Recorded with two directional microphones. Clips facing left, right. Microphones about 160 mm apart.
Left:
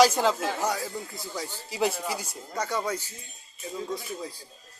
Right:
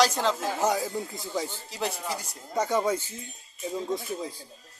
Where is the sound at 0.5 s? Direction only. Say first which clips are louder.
Right 3 dB; 20° right (ahead or behind).